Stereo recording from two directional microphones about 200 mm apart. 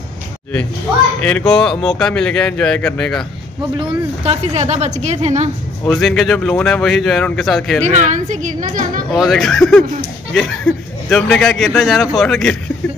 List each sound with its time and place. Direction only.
1.2 s speech: 5° left (ahead or behind)
3.7 s speech: 25° right (ahead or behind)
5.9 s speech: centre (ahead or behind)
7.8 s speech: 35° right (ahead or behind)
9.1 s speech: centre (ahead or behind)
11.1 s speech: 5° left (ahead or behind)